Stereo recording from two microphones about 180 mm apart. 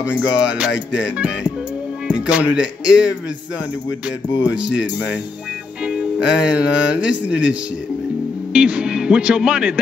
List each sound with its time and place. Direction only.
0.1 s music: 80° left
1.1 s speech: 5° right (ahead or behind)
5.9 s music: 5° right (ahead or behind)
8.5 s speech: 5° right (ahead or behind)